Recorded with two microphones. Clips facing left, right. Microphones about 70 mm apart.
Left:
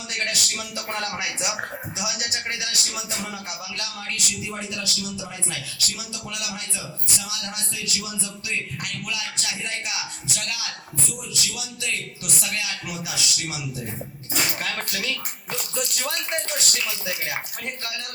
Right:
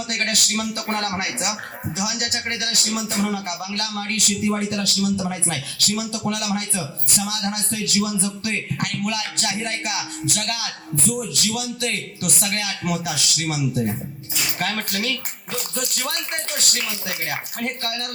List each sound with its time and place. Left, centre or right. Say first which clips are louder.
0.1 s speech: right 2 dB; right